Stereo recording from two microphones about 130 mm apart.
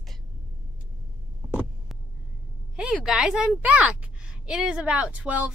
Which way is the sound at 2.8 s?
5° right (ahead or behind).